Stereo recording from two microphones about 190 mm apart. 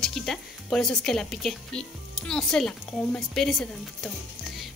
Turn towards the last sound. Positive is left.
turn(degrees=0)  # may be behind; listen again after turning